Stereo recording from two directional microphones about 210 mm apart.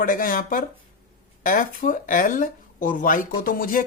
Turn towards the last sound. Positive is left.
turn(degrees=40)  # may be behind; listen again after turning